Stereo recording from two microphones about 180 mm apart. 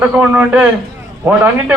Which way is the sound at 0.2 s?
10° right (ahead or behind).